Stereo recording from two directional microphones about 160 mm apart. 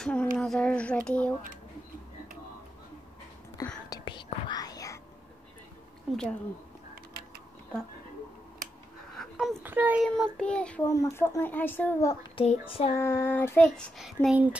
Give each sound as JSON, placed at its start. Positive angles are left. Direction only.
{"t": 0.0, "sound": "a sound", "side_deg": 5}
{"t": 3.9, "sound": "whispering", "side_deg": 30}
{"t": 6.1, "sound": "speech", "side_deg": -5}
{"t": 9.1, "sound": "a sound", "side_deg": 0}
{"t": 9.6, "sound": "child singing", "side_deg": -10}
{"t": 10.0, "sound": "child singing", "side_deg": 5}
{"t": 10.9, "sound": "child singing", "side_deg": 20}
{"t": 12.4, "sound": "a sound", "side_deg": 35}
{"t": 12.9, "sound": "child singing", "side_deg": 15}